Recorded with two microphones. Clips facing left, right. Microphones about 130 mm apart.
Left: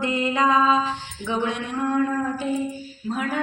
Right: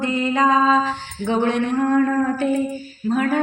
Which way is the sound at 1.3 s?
50° right (ahead or behind).